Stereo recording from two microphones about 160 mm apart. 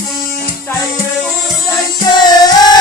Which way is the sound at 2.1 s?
25° left (ahead or behind).